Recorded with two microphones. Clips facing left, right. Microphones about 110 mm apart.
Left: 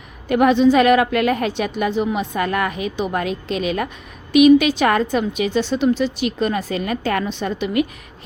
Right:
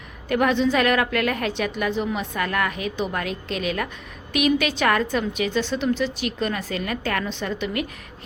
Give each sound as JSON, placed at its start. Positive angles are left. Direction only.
{"t": 0.3, "sound": "a woman's voice", "side_deg": 20}